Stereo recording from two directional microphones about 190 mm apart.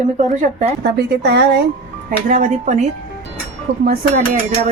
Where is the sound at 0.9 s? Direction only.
60° right (ahead or behind).